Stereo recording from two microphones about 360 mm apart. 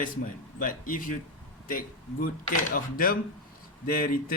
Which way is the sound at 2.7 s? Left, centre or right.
Left.